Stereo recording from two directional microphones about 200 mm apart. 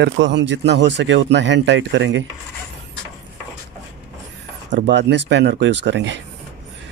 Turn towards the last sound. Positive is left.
turn(degrees=-65)  # may be behind; listen again after turning